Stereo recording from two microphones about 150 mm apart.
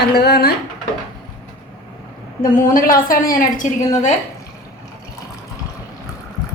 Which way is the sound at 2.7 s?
70° left (ahead or behind).